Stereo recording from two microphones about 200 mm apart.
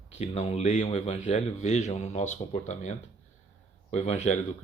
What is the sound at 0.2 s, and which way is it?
A man's voice, 35° left (ahead or behind).